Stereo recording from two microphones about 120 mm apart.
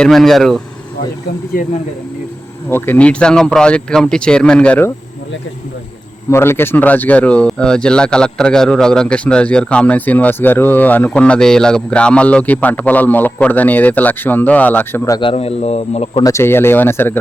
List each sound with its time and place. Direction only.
0.0 s speech: centre (ahead or behind)
2.6 s speech: 15° left (ahead or behind)
6.3 s speech: 20° left (ahead or behind)
15.2 s a man's voice: 50° left (ahead or behind)
16.2 s speech: 20° left (ahead or behind)